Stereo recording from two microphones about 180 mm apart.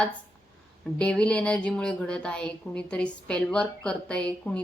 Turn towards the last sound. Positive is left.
turn(degrees=5)  # may be behind; listen again after turning